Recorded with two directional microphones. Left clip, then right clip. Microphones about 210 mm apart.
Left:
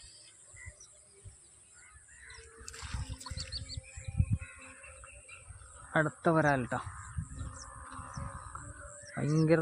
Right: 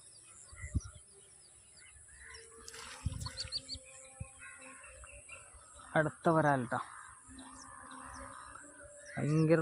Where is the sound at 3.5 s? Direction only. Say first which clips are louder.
Right 3 dB; 25° right (ahead or behind).